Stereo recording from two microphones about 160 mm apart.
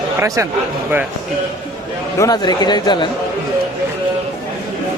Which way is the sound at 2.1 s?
20° left (ahead or behind).